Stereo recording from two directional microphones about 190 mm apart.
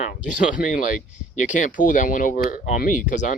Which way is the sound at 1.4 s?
40° left (ahead or behind).